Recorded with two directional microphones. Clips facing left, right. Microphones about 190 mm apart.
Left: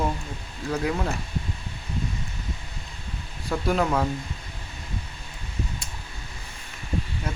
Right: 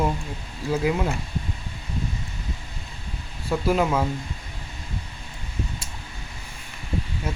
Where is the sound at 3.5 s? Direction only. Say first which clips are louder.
Right 2 dB; 5° right (ahead or behind).